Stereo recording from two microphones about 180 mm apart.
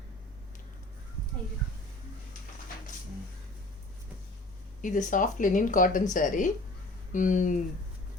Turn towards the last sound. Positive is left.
turn(degrees=45)  # may be behind; listen again after turning